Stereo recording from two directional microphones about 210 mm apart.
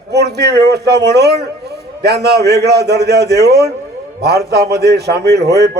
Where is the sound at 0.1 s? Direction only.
50° right (ahead or behind).